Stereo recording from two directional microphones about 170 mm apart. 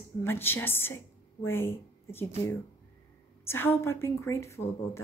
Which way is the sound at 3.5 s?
15° left (ahead or behind).